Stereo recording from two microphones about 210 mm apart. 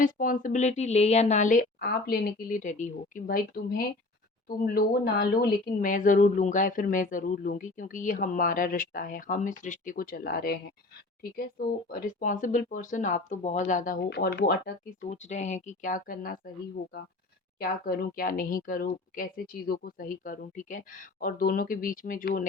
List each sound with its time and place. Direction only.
0.0 s speech: 40° left (ahead or behind)
11.9 s speech: 40° left (ahead or behind)
15.0 s speech: 35° left (ahead or behind)
17.6 s speech: 45° left (ahead or behind)